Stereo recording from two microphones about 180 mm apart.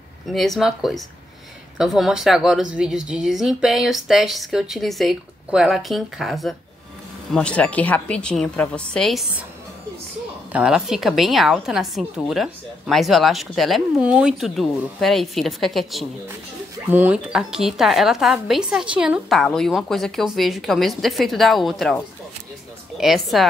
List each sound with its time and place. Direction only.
0.3 s a woman's voice: centre (ahead or behind)
10.5 s a woman's voice: 5° right (ahead or behind)